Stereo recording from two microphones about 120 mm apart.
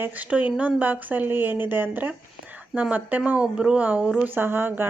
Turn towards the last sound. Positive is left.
turn(degrees=-20)  # may be behind; listen again after turning